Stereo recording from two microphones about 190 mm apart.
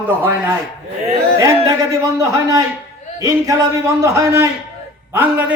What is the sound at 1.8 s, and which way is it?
A man's voice, 15° right (ahead or behind).